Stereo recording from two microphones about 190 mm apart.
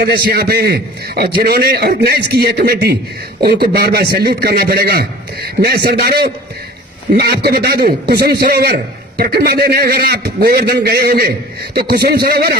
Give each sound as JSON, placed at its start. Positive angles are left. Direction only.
{"t": 0.0, "sound": "a man's voice", "side_deg": -55}